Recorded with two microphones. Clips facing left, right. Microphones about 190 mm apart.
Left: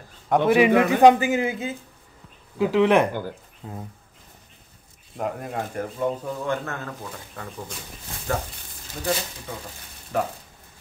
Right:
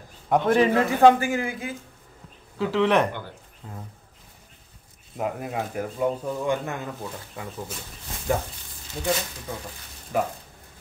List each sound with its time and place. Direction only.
0.3 s a man's voice: 10° left (ahead or behind)
3.1 s speech: 40° left (ahead or behind)
3.6 s a man's voice: 20° left (ahead or behind)
5.1 s speech: 5° right (ahead or behind)
10.1 s speech: 10° right (ahead or behind)